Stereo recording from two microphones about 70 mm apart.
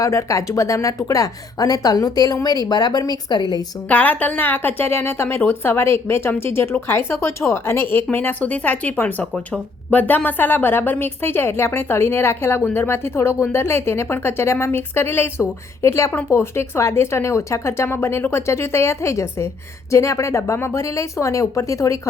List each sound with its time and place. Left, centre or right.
0.0 s a woman's voice: left
3.8 s a woman's voice: left